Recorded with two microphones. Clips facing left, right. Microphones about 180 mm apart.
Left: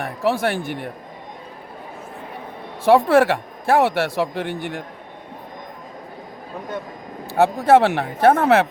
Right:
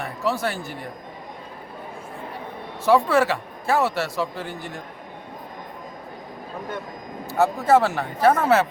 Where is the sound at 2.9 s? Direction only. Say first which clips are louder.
Left 4 dB; 55° left (ahead or behind).